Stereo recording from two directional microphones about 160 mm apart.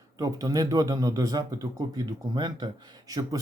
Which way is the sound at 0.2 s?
20° right (ahead or behind).